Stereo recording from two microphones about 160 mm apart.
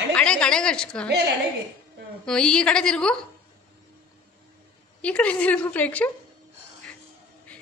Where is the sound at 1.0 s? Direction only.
90° right.